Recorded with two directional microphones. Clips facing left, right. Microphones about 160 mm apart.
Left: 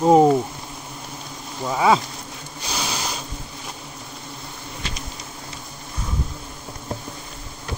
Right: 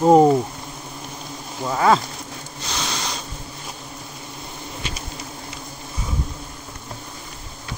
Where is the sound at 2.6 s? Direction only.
10° left (ahead or behind).